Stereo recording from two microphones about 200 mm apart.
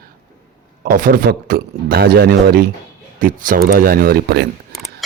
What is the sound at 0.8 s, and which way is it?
Speech, 40° right (ahead or behind).